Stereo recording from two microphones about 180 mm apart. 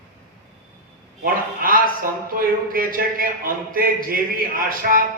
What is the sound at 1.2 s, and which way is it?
A man's voice, 50° right (ahead or behind).